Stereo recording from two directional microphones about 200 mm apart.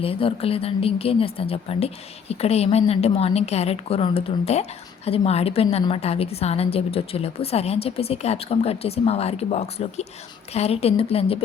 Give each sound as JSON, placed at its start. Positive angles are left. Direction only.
{"t": 0.0, "sound": "a woman's voice", "side_deg": 30}